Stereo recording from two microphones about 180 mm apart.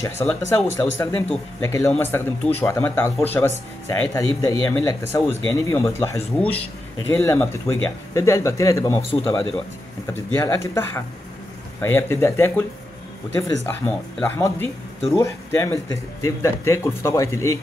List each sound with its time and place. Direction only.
0.0 s speech: 15° left (ahead or behind)
13.7 s speech: 10° left (ahead or behind)